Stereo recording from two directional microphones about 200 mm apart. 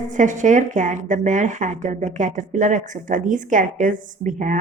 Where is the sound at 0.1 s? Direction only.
40° right (ahead or behind).